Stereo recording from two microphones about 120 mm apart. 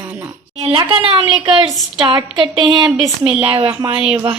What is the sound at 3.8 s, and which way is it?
Speech, 45° right (ahead or behind).